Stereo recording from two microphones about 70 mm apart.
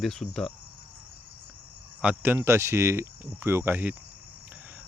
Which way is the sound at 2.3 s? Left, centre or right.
Right.